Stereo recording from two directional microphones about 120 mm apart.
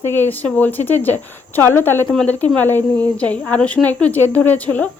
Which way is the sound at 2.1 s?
10° left (ahead or behind).